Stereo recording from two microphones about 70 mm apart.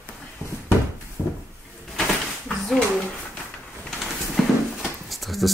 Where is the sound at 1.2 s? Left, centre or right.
Left.